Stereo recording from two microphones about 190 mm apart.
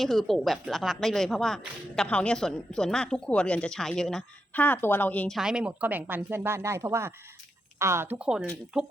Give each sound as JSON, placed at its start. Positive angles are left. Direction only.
{"t": 0.0, "sound": "a woman's voice", "side_deg": 0}
{"t": 5.4, "sound": "speech", "side_deg": -5}